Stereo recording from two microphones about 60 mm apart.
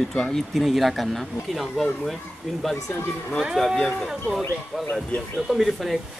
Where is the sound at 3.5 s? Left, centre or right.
Centre.